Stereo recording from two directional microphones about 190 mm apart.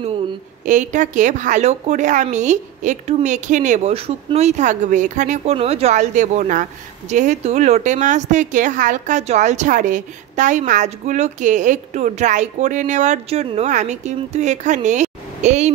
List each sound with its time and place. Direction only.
0.7 s a woman's voice: 40° right (ahead or behind)